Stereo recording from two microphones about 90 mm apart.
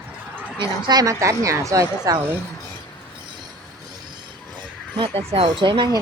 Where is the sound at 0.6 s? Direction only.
50° right (ahead or behind).